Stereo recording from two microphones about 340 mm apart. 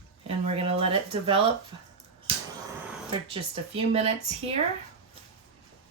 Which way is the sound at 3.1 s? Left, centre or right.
Centre.